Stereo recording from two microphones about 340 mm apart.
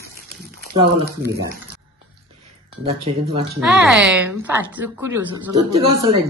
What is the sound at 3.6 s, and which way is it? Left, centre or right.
A woman's voice, centre.